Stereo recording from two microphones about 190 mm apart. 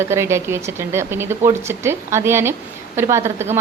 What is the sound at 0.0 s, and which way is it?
Speech, 15° right (ahead or behind).